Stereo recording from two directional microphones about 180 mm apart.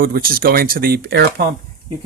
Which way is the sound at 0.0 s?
55° right (ahead or behind).